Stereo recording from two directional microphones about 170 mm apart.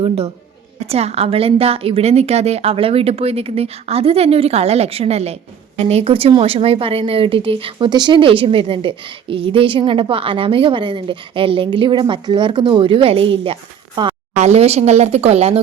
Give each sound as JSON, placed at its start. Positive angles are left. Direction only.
{"t": 0.9, "sound": "a woman's voice", "side_deg": -35}
{"t": 14.3, "sound": "a woman's voice", "side_deg": -40}